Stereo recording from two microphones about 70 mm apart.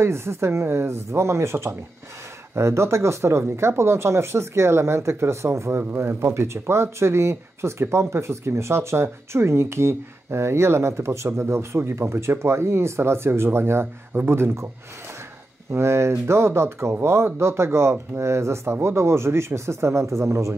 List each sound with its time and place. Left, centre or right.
0.0 s speech: right
15.7 s speech: right